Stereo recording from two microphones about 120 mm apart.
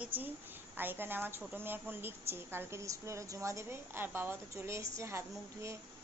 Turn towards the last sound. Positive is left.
turn(degrees=-25)  # may be behind; listen again after turning